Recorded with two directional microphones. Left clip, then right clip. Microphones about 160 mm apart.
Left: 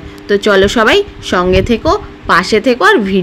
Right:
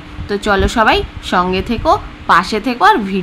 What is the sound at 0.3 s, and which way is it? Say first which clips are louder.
A woman's voice: left 6 dB; 15° left (ahead or behind).